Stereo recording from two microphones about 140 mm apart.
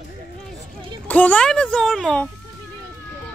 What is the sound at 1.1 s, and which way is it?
A child's voice, 10° left (ahead or behind).